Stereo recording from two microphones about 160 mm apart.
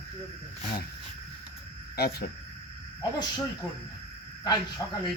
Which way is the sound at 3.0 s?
25° left (ahead or behind).